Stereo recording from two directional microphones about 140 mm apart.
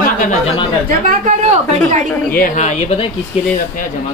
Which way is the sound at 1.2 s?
60° right (ahead or behind).